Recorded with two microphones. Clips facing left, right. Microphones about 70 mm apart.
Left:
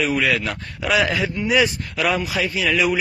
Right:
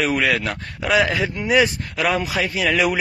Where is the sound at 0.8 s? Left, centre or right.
Right.